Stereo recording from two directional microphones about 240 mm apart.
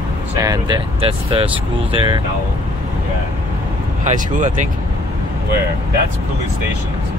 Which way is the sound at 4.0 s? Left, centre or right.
Right.